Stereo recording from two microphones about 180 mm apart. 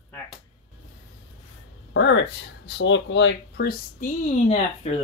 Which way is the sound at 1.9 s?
90° left.